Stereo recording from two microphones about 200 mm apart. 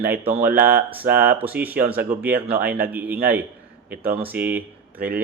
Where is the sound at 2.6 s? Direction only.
50° right (ahead or behind).